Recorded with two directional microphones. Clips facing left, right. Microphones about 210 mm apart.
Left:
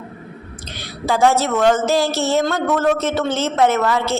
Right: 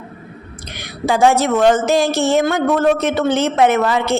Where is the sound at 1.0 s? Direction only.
15° right (ahead or behind).